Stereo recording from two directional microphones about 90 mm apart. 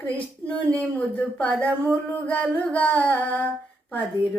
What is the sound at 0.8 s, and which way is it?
Female singing, 15° left (ahead or behind).